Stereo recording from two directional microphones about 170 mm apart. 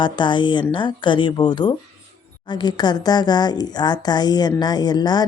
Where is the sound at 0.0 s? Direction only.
25° left (ahead or behind).